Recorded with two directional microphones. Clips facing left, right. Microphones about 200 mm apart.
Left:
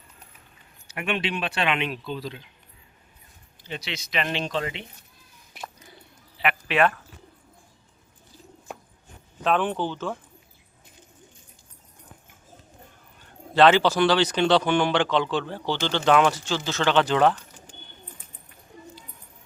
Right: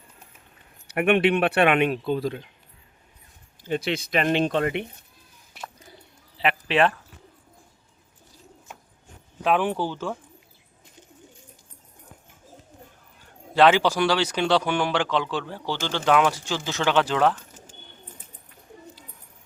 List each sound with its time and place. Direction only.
0.9 s speech: 60° right (ahead or behind)
3.6 s speech: 50° right (ahead or behind)
6.4 s a sound: 30° right (ahead or behind)
9.4 s speech: 10° right (ahead or behind)
13.5 s speech: 10° right (ahead or behind)